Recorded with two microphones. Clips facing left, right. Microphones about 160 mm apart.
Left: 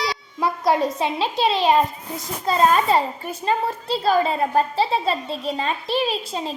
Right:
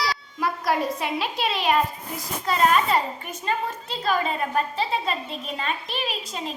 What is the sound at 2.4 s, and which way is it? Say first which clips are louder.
A child's voice: left 3 dB; 30° left (ahead or behind).